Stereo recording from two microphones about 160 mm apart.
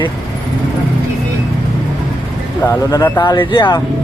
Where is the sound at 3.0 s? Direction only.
25° left (ahead or behind).